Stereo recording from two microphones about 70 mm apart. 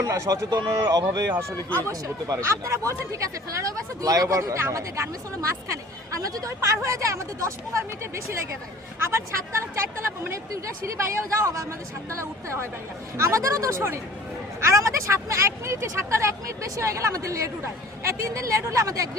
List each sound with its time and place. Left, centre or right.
0.0 s speech: right
0.5 s speech: right
2.3 s speech: right